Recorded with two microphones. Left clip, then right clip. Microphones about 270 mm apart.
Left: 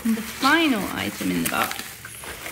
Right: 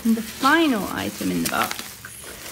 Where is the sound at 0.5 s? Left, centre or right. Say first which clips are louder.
Right 1 dB; centre.